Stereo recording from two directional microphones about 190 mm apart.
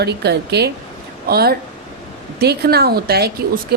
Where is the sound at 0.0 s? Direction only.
60° right (ahead or behind).